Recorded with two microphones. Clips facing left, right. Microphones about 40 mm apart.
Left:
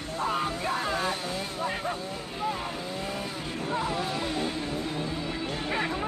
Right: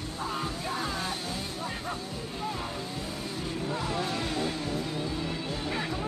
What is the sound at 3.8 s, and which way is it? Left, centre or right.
Music, centre.